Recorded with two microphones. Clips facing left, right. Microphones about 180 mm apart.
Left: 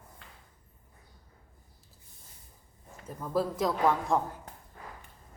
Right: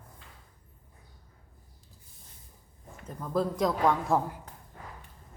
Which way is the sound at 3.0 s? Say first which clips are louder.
Right 1 dB; 10° left (ahead or behind).